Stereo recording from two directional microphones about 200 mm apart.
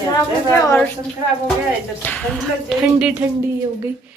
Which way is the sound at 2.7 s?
Centre (ahead or behind).